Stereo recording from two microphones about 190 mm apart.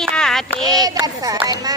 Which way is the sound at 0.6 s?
20° right (ahead or behind).